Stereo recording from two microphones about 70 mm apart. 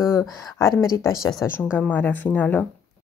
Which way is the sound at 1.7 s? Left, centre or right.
Left.